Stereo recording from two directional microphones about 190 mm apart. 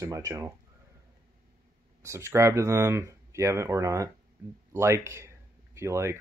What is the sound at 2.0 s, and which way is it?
Speech, 15° right (ahead or behind).